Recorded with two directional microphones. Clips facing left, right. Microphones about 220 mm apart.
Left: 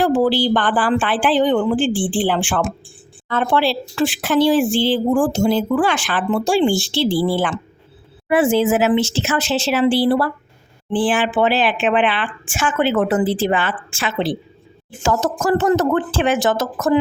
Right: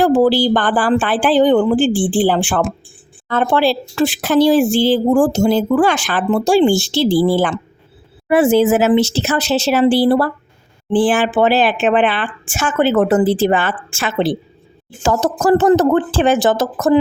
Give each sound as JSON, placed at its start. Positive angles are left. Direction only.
{"t": 0.0, "sound": "speech", "side_deg": -40}
{"t": 15.0, "sound": "speech", "side_deg": -35}